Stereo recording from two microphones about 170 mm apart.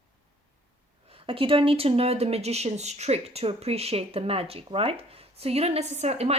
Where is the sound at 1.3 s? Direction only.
30° right (ahead or behind).